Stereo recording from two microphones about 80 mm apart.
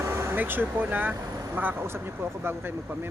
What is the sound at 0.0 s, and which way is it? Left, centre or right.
Speech, right.